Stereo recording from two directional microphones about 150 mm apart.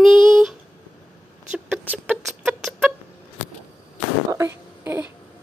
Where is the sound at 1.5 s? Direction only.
10° right (ahead or behind).